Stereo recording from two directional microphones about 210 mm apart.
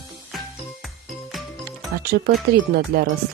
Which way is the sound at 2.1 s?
45° right (ahead or behind).